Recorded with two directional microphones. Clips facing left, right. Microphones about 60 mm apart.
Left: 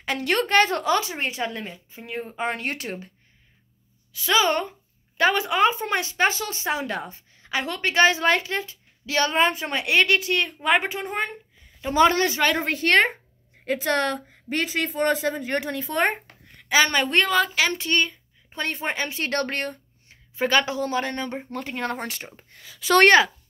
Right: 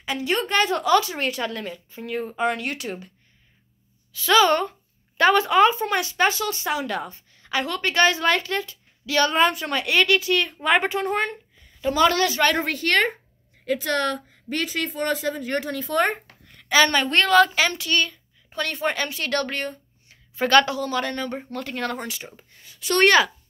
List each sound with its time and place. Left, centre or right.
0.0 s a woman's voice: left
0.5 s a woman's voice: left
0.9 s a woman's voice: left
4.1 s a woman's voice: left
10.6 s a woman's voice: centre
11.9 s a woman's voice: left
12.4 s a woman's voice: centre
17.7 s a woman's voice: left
20.3 s a woman's voice: centre
20.7 s a woman's voice: left
22.0 s speech: left
23.0 s a woman's voice: left